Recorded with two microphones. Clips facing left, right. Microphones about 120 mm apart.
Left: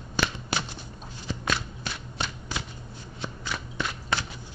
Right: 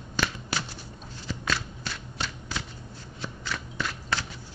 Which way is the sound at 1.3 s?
20° left (ahead or behind).